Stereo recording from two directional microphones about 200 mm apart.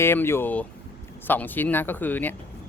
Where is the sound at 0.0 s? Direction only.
10° left (ahead or behind).